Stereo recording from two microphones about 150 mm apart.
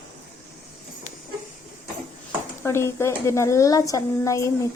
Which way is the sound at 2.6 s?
15° left (ahead or behind).